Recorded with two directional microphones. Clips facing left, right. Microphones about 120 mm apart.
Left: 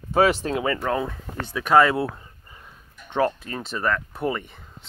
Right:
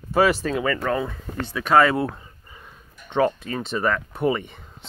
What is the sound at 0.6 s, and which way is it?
Speech, 10° left (ahead or behind).